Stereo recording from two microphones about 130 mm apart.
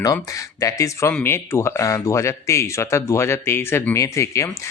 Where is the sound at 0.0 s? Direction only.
25° left (ahead or behind).